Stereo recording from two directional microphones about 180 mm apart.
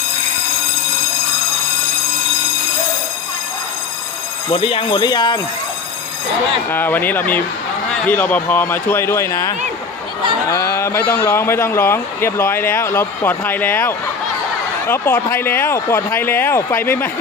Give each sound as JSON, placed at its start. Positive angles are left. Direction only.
{"t": 4.5, "sound": "speech", "side_deg": 30}
{"t": 6.7, "sound": "speech", "side_deg": 10}